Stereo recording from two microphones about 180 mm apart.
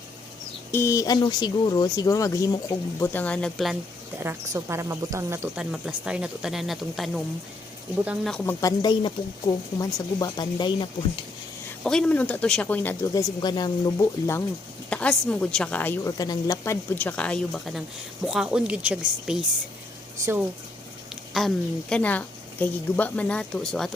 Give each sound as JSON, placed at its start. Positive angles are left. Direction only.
{"t": 0.7, "sound": "speech", "side_deg": 15}
{"t": 4.2, "sound": "speech", "side_deg": -15}
{"t": 8.4, "sound": "speech", "side_deg": 20}
{"t": 11.8, "sound": "a woman's voice", "side_deg": 5}
{"t": 13.4, "sound": "a woman's voice", "side_deg": 25}
{"t": 21.3, "sound": "a woman's voice", "side_deg": 5}